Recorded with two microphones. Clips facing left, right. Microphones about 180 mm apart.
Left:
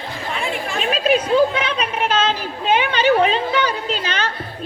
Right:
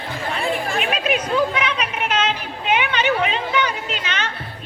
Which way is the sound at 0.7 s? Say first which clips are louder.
Left 3 dB; 30° left (ahead or behind).